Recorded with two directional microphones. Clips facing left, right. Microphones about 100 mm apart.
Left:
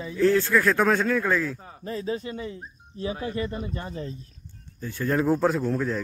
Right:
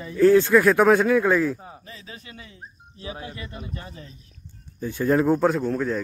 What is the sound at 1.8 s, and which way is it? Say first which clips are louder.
Speech: left 13 dB; 40° left (ahead or behind).